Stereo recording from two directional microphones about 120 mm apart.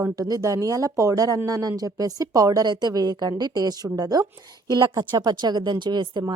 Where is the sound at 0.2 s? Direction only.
30° right (ahead or behind).